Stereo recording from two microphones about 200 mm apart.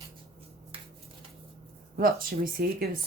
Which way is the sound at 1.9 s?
45° right (ahead or behind).